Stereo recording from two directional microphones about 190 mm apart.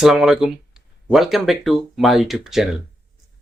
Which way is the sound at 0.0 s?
5° right (ahead or behind).